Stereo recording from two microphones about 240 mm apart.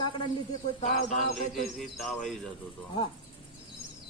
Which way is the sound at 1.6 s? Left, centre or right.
Centre.